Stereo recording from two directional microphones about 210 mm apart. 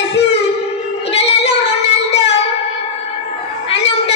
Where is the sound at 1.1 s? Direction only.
30° left (ahead or behind).